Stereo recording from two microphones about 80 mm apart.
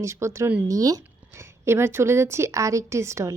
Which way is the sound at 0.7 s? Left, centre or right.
Right.